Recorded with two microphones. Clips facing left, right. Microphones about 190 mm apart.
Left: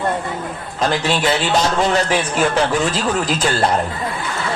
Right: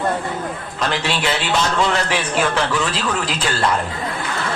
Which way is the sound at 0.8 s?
40° left (ahead or behind).